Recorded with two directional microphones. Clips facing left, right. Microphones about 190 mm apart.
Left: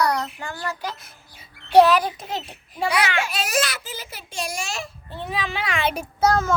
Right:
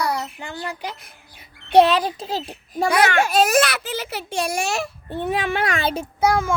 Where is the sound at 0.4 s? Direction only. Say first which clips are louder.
Even; 15° right (ahead or behind); by 5.9 s 45° right (ahead or behind).